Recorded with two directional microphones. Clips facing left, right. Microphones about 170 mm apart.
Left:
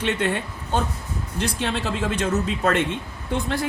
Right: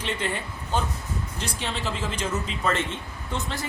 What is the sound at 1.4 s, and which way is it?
Speech, 60° left (ahead or behind).